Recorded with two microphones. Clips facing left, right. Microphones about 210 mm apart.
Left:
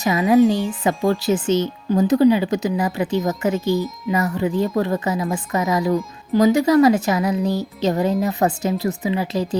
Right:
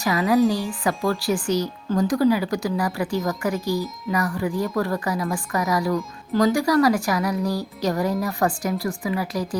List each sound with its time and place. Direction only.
0.0 s speech: 20° left (ahead or behind)